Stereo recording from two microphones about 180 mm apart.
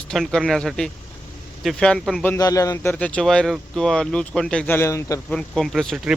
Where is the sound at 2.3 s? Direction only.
20° left (ahead or behind).